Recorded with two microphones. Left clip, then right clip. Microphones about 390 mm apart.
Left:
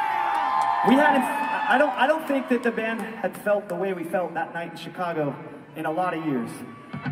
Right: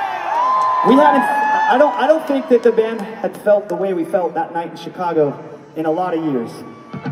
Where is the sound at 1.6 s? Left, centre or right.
Left.